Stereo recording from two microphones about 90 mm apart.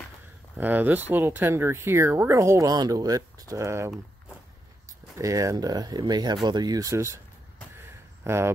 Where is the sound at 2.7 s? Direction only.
45° right (ahead or behind).